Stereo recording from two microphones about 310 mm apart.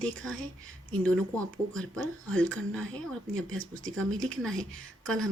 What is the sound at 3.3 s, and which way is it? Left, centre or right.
Speech, right.